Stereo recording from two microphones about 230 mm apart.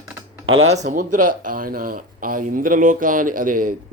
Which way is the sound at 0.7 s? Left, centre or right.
Right.